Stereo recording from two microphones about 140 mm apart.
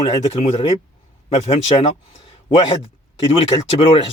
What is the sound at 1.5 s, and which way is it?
Speech, 40° left (ahead or behind).